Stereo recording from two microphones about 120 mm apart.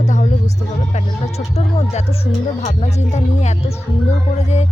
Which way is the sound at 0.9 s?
60° left (ahead or behind).